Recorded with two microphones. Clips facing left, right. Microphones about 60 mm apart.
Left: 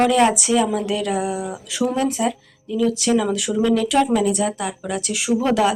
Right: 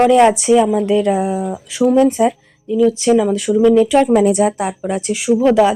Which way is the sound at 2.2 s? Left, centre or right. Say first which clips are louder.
Right 7 dB; right.